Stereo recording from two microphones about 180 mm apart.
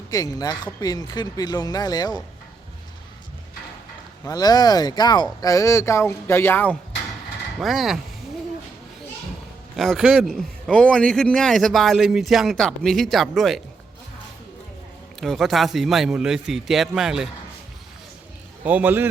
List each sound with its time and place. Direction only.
0.1 s speech: 20° left (ahead or behind)
4.2 s speech: 20° left (ahead or behind)
7.6 s a man's voice: centre (ahead or behind)
9.7 s a man's voice: centre (ahead or behind)
15.2 s a man's voice: centre (ahead or behind)
18.6 s a man's voice: 10° right (ahead or behind)